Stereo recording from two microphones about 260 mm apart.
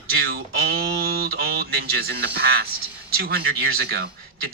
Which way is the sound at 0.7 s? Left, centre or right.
Right.